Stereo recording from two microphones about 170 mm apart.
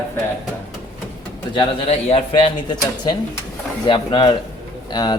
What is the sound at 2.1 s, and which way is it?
Speech, 35° left (ahead or behind).